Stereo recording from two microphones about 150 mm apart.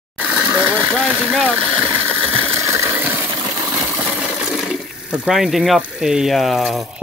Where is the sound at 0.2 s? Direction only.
5° right (ahead or behind).